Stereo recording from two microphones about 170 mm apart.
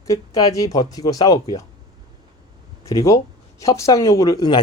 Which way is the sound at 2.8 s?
20° left (ahead or behind).